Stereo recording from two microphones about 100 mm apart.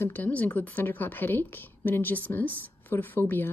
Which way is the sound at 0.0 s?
20° left (ahead or behind).